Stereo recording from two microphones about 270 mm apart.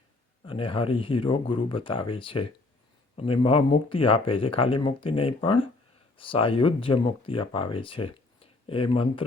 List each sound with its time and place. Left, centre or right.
0.4 s speech: centre